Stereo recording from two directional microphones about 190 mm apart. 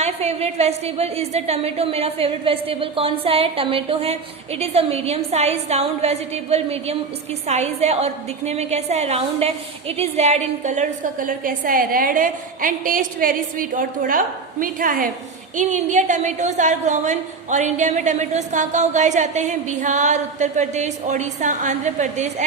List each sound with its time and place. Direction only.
0.0 s a woman's voice: 35° right (ahead or behind)